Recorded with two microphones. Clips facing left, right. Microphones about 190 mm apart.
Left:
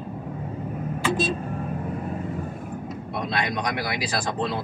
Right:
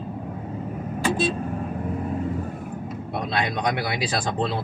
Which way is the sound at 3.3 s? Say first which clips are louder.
Right 3 dB; 30° right (ahead or behind).